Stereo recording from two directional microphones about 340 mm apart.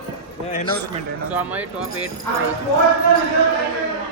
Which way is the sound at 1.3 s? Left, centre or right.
Centre.